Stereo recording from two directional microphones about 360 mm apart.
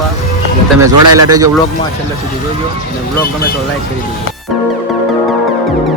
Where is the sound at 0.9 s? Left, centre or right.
Right.